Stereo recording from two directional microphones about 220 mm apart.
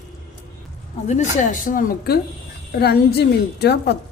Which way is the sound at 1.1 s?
35° left (ahead or behind).